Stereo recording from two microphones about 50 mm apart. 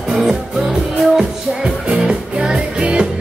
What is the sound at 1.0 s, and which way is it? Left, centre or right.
Music, centre.